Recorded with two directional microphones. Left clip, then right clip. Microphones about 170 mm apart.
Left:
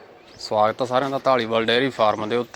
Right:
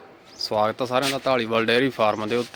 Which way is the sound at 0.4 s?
15° right (ahead or behind).